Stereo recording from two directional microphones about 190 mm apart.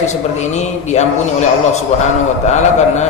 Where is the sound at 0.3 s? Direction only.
35° left (ahead or behind).